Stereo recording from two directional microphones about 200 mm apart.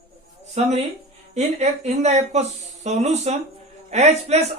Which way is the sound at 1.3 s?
35° right (ahead or behind).